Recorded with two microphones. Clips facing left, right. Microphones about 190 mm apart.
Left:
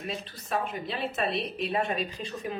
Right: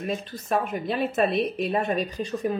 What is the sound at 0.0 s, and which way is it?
Speech, 50° right (ahead or behind).